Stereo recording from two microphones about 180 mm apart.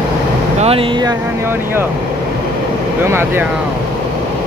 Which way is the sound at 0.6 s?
30° right (ahead or behind).